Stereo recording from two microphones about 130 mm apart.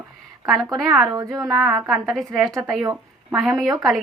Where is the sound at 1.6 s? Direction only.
Centre (ahead or behind).